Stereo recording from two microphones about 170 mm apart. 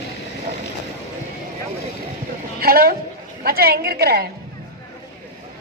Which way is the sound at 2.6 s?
60° right (ahead or behind).